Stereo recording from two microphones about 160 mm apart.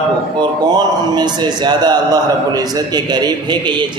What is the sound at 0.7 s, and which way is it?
A man's voice, 25° right (ahead or behind).